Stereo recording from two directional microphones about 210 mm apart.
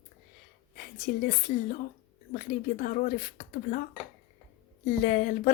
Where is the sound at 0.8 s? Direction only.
40° left (ahead or behind).